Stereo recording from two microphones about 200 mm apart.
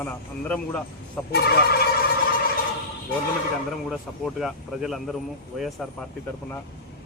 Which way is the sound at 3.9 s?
Centre (ahead or behind).